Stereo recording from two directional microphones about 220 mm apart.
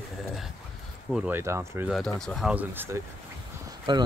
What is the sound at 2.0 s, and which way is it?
Speech, 5° left (ahead or behind).